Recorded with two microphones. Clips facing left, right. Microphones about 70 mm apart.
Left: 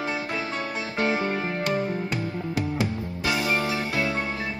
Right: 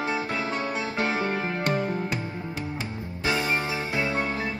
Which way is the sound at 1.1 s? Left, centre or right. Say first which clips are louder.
Left 1 dB; right.